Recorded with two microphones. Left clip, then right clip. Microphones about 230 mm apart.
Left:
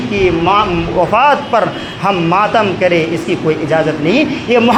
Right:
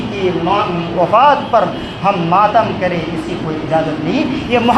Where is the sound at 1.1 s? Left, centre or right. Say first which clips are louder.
Right 2 dB; left.